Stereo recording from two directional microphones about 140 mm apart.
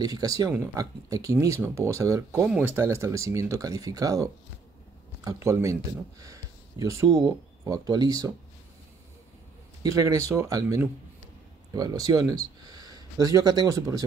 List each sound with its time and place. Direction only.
0.0 s speech: 25° right (ahead or behind)
2.4 s speech: 10° right (ahead or behind); by 8.3 s 25° right (ahead or behind)
9.8 s speech: 25° right (ahead or behind)